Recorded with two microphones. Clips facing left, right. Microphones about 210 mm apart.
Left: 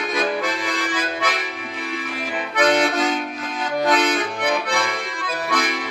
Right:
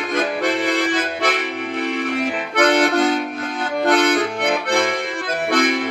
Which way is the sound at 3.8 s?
55° right (ahead or behind).